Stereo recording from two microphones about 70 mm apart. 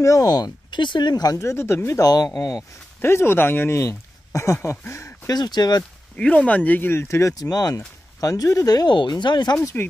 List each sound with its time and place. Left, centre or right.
0.0 s speech: left
1.4 s speech: left
2.0 s speech: left
3.0 s speech: left
4.3 s speech: left
5.3 s speech: left
6.1 s speech: centre
7.0 s speech: left